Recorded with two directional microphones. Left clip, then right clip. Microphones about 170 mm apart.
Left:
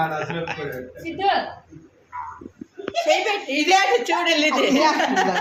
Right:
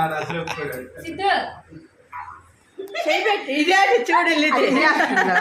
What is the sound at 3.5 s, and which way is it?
A woman's voice, 55° right (ahead or behind).